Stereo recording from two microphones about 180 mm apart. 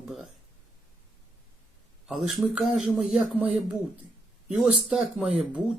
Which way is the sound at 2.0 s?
Centre (ahead or behind).